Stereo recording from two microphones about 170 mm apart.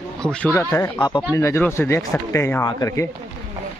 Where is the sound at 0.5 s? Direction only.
15° left (ahead or behind).